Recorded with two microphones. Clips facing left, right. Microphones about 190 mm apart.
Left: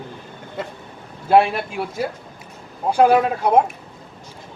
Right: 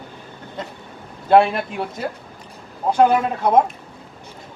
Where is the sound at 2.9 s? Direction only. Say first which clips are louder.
Left 1 dB; 10° left (ahead or behind).